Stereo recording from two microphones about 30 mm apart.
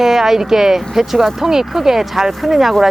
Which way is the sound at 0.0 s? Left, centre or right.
Centre.